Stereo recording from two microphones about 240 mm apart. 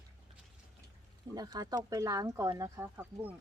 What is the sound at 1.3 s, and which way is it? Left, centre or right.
Speech, centre.